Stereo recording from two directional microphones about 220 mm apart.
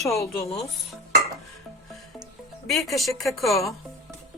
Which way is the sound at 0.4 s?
25° left (ahead or behind).